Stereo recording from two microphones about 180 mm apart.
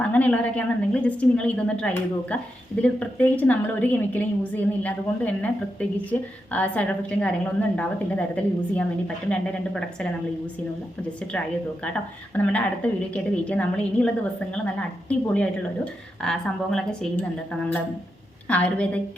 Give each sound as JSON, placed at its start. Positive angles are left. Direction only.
{"t": 0.0, "sound": "a woman's voice", "side_deg": 10}
{"t": 11.3, "sound": "a woman's voice", "side_deg": 5}
{"t": 15.3, "sound": "a woman's voice", "side_deg": 5}
{"t": 18.4, "sound": "a woman's voice", "side_deg": 10}